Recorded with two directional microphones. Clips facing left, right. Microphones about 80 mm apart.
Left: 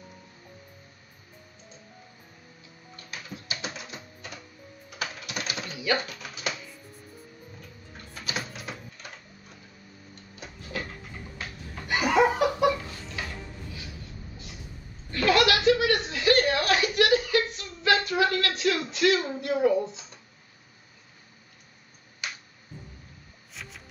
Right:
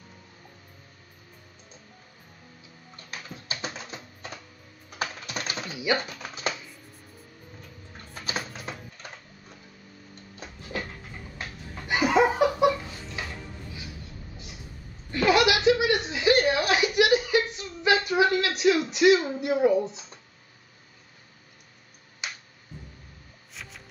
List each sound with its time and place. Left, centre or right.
3.1 s typing: right
5.7 s speech: centre
6.0 s a sound: right
11.9 s laughter: centre
15.0 s chuckle: centre
19.4 s a sound: centre
22.2 s finger snapping: centre
23.5 s music: centre